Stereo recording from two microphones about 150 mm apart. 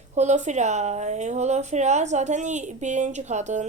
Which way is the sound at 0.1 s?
50° right (ahead or behind).